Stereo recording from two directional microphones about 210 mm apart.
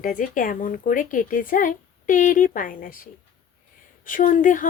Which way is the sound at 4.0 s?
40° left (ahead or behind).